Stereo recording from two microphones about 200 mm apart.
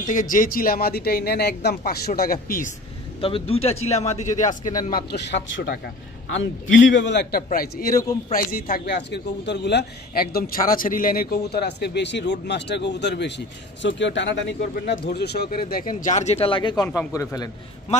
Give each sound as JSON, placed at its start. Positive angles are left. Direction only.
{"t": 0.0, "sound": "speech", "side_deg": 40}
{"t": 3.2, "sound": "speech", "side_deg": 25}
{"t": 4.8, "sound": "a man's voice", "side_deg": 50}
{"t": 6.3, "sound": "a man's voice", "side_deg": 70}